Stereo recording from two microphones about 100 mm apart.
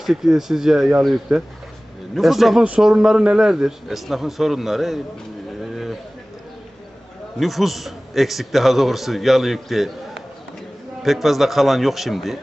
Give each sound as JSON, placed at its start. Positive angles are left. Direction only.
{"t": 0.0, "sound": "a man's voice", "side_deg": -5}
{"t": 2.1, "sound": "a man's voice", "side_deg": 0}
{"t": 5.7, "sound": "a sound", "side_deg": 0}
{"t": 7.3, "sound": "a man's voice", "side_deg": 0}